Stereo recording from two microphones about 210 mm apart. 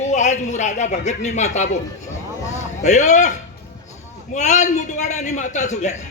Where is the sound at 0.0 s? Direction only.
35° left (ahead or behind).